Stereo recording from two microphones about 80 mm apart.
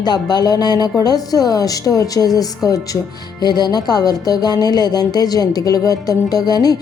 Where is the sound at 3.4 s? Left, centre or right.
Left.